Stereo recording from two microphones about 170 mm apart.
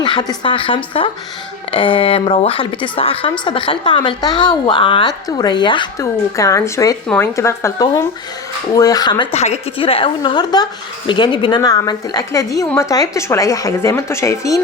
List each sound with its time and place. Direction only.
0.0 s a woman's voice: 25° left (ahead or behind)
9.3 s a woman's voice: 40° left (ahead or behind); by 14.6 s 20° left (ahead or behind)